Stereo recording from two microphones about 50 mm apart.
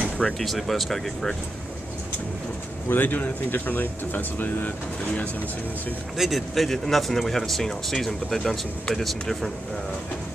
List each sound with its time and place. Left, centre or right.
0.4 s speech: centre
2.9 s speech: left
6.1 s speech: centre